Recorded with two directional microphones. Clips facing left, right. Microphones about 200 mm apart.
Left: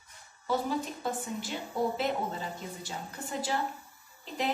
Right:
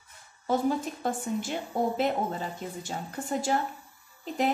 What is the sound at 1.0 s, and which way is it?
A woman's voice, 45° right (ahead or behind).